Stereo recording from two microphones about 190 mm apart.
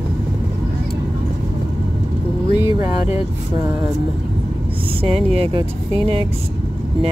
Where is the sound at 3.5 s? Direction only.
25° right (ahead or behind).